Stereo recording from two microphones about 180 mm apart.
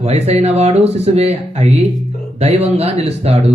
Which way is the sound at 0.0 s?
35° right (ahead or behind).